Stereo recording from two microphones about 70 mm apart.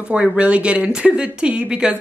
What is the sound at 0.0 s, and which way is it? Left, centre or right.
Speech, centre.